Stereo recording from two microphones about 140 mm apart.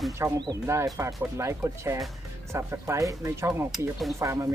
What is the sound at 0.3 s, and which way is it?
Speech, 25° right (ahead or behind).